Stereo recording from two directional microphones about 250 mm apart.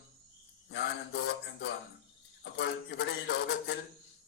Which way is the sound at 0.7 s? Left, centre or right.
Left.